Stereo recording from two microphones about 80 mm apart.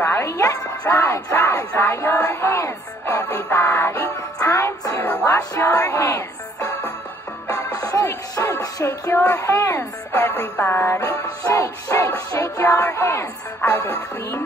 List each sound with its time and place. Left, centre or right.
0.0 s speech: left
0.8 s speech: left
1.1 s a sound: left
1.8 s music: left
7.4 s music: left
9.4 s a sound: left
9.7 s speech: left
11.1 s music: left
12.6 s a sound: left
13.6 s speech: left